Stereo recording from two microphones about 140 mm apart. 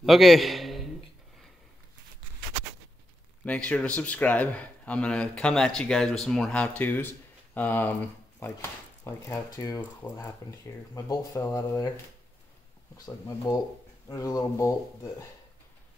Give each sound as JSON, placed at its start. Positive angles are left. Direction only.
{"t": 0.0, "sound": "a man's voice", "side_deg": 0}
{"t": 3.4, "sound": "speech", "side_deg": 10}
{"t": 12.9, "sound": "speech", "side_deg": 25}